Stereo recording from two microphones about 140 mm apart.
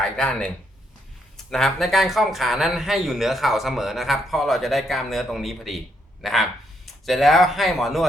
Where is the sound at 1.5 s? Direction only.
Centre (ahead or behind).